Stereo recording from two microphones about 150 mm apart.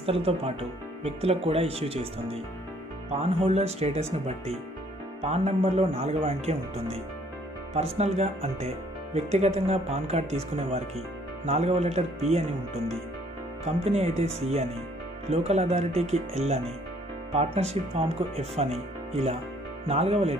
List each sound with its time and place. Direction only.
0.0 s speech: 40° right (ahead or behind)
3.1 s speech: 45° right (ahead or behind)
8.0 s speech: 45° right (ahead or behind)
19.9 s speech: 45° right (ahead or behind)